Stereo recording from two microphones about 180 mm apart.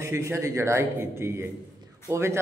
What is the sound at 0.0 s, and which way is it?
A man's voice, 15° right (ahead or behind).